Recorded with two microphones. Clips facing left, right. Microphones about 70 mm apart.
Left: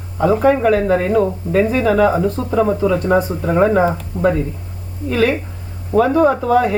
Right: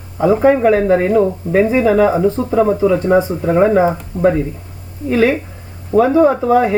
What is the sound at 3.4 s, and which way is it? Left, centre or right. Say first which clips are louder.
Speech: right 1 dB; centre.